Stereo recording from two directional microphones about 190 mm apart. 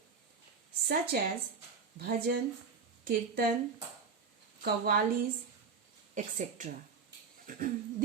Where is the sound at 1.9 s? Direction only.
50° right (ahead or behind).